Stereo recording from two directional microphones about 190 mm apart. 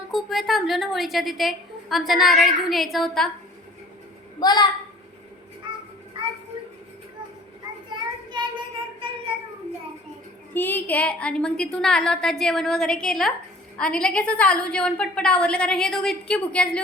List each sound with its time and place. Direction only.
0.1 s a woman's voice: centre (ahead or behind)
4.4 s a child's voice: 20° left (ahead or behind)
5.6 s music: 25° right (ahead or behind)
7.9 s child singing: 25° right (ahead or behind)
10.5 s a woman's voice: 10° left (ahead or behind)